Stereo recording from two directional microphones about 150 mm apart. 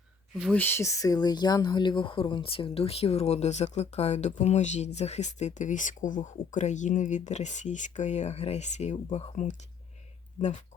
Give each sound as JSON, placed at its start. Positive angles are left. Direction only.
{"t": 0.5, "sound": "speech", "side_deg": 15}